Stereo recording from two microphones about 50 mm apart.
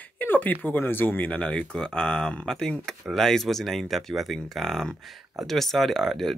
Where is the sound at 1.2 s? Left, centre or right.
Left.